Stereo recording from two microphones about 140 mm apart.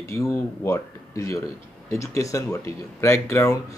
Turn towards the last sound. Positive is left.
turn(degrees=20)  # may be behind; listen again after turning